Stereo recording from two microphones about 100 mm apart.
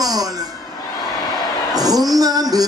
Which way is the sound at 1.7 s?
40° right (ahead or behind).